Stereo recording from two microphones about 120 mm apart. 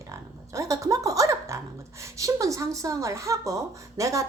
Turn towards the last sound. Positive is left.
turn(degrees=-25)  # may be behind; listen again after turning